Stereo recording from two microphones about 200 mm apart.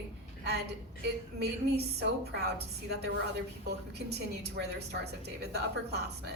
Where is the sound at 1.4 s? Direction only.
55° right (ahead or behind).